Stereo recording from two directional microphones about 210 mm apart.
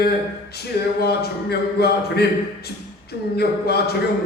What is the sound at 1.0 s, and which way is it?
Speech, 50° left (ahead or behind).